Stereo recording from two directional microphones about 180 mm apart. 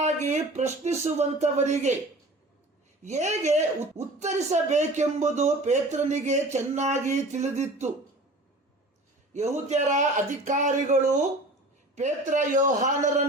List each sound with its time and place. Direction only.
0.0 s speech: 40° right (ahead or behind)
3.0 s speech: 40° right (ahead or behind)
9.3 s a man's voice: 40° right (ahead or behind)
11.9 s a man's voice: 40° right (ahead or behind)